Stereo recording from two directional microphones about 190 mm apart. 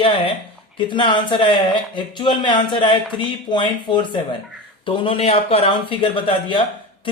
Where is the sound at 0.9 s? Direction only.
25° left (ahead or behind).